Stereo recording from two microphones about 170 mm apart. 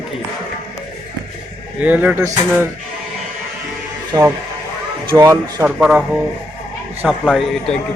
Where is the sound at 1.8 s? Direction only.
10° right (ahead or behind).